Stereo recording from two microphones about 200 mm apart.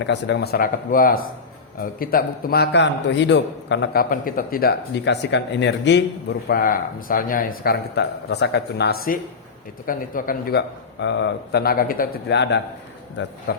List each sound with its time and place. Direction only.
0.0 s a man's voice: 60° left (ahead or behind)
4.1 s a man's voice: 45° left (ahead or behind); by 6.1 s 60° left (ahead or behind)
6.5 s speech: 45° left (ahead or behind)
11.0 s a man's voice: 60° left (ahead or behind)
13.5 s speech: 50° left (ahead or behind)